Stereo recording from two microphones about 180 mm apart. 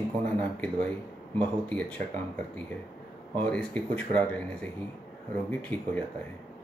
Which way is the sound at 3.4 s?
5° left (ahead or behind).